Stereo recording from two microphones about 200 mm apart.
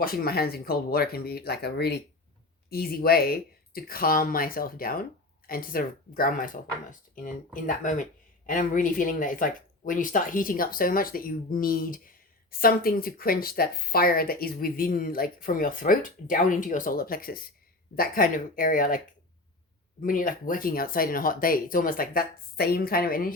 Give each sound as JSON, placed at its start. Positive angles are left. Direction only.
{"t": 0.0, "sound": "a woman's voice", "side_deg": 50}